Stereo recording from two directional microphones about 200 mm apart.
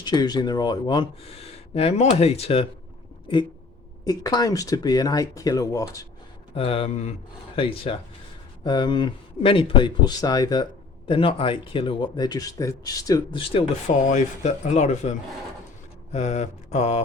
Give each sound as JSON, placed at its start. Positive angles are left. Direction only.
{"t": 0.0, "sound": "speech", "side_deg": 20}
{"t": 4.0, "sound": "speech", "side_deg": 20}
{"t": 6.5, "sound": "speech", "side_deg": 30}
{"t": 16.1, "sound": "mantra", "side_deg": 35}